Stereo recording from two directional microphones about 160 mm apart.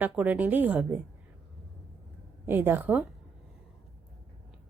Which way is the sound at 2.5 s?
15° right (ahead or behind).